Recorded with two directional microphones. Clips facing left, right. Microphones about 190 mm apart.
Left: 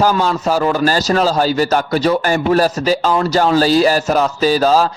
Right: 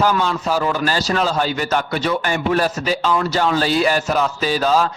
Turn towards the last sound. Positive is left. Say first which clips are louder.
# left 5 dB
turn(degrees=40)  # may be behind; listen again after turning